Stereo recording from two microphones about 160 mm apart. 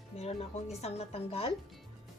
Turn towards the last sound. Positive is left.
turn(degrees=40)  # may be behind; listen again after turning